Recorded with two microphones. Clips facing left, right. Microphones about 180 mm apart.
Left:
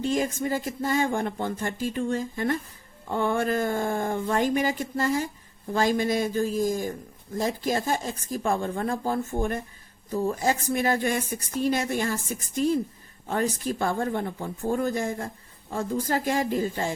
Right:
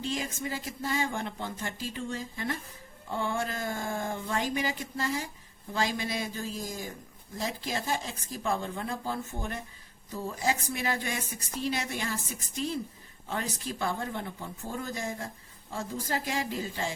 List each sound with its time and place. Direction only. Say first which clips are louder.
0.0 s a woman's voice: left 8 dB; 50° left (ahead or behind)